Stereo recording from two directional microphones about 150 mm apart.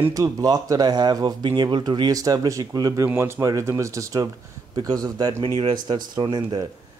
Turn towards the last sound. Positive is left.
turn(degrees=-30)  # may be behind; listen again after turning